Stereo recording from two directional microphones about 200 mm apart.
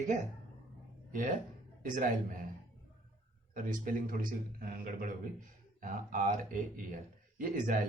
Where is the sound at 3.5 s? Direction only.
45° right (ahead or behind).